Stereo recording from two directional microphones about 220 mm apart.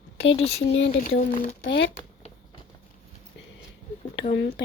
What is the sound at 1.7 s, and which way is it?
Speech, 55° left (ahead or behind).